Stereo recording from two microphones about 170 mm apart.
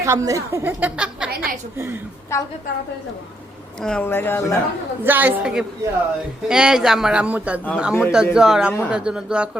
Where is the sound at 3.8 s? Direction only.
5° left (ahead or behind).